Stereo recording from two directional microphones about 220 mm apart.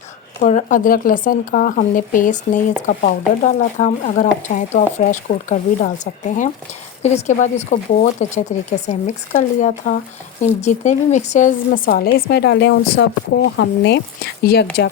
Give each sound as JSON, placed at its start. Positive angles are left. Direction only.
{"t": 0.4, "sound": "speech", "side_deg": 35}
{"t": 7.0, "sound": "speech", "side_deg": 30}